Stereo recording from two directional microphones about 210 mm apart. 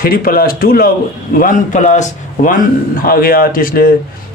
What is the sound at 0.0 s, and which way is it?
A man's voice, 45° left (ahead or behind).